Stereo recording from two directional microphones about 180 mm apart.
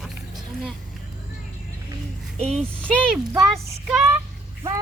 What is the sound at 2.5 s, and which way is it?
Speech, 5° left (ahead or behind).